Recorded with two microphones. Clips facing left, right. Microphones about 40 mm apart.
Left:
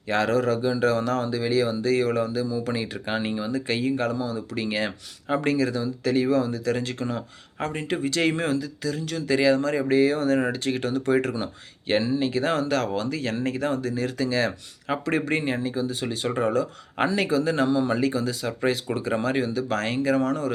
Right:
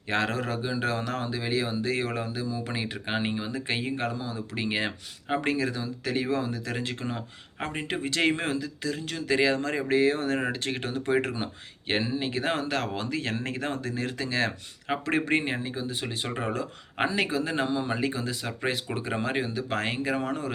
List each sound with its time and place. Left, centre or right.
0.1 s speech: right